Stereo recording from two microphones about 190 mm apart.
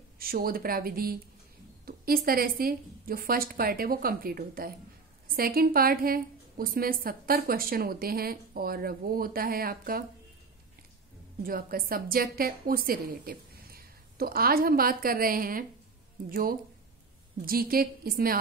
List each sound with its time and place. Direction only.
0.2 s a woman's voice: 50° right (ahead or behind)
11.4 s a woman's voice: 50° right (ahead or behind)